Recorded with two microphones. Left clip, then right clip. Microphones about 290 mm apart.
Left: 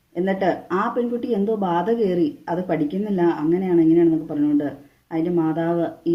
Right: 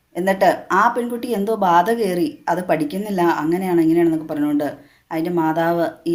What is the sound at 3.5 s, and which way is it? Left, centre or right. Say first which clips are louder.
A man's voice: even; right.